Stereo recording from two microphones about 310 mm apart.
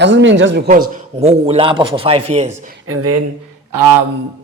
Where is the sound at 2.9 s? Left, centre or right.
Right.